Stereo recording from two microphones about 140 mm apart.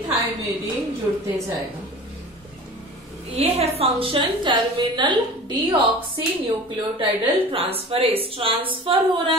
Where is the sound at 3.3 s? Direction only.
50° right (ahead or behind); by 5.7 s 35° right (ahead or behind).